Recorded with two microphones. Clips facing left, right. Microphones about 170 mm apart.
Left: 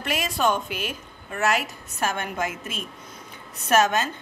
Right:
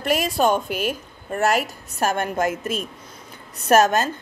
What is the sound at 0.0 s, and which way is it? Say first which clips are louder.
A woman's voice: right 5 dB; 40° right (ahead or behind).